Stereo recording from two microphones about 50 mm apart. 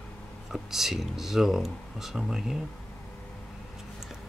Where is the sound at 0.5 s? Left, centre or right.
Centre.